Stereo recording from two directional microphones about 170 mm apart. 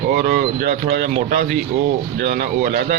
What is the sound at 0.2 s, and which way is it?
Speech, 60° right (ahead or behind).